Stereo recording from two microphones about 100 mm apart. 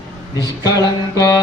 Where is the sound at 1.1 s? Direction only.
35° left (ahead or behind).